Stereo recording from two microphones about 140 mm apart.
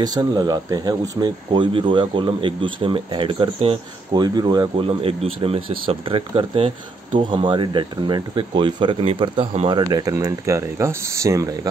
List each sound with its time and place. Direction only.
0.0 s speech: 30° right (ahead or behind)